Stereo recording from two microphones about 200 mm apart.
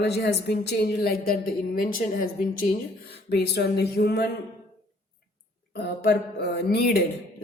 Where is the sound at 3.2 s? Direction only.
55° left (ahead or behind).